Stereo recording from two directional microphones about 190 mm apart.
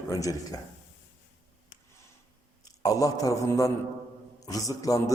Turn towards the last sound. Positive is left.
turn(degrees=20)  # may be behind; listen again after turning